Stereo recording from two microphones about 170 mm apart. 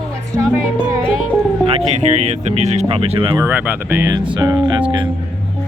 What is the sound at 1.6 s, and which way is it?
Speech, 35° right (ahead or behind).